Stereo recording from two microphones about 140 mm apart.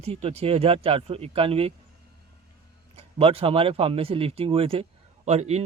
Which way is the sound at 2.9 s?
45° right (ahead or behind).